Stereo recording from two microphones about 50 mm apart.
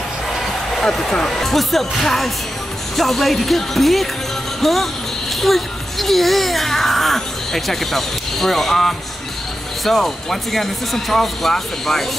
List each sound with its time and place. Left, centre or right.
1.1 s speech: centre